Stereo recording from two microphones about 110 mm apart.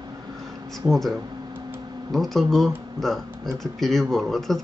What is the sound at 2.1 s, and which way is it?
Speech, centre (ahead or behind).